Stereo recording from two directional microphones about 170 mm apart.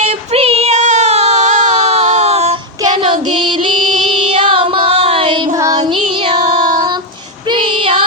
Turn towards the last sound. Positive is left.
turn(degrees=-30)  # may be behind; listen again after turning